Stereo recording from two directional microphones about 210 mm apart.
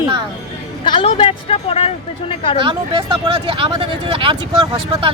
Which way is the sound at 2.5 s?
20° right (ahead or behind).